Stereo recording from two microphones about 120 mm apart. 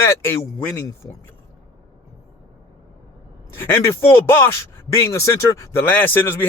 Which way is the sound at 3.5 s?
20° left (ahead or behind).